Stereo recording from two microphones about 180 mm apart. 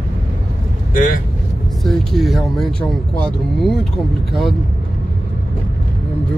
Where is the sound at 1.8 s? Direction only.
Centre (ahead or behind).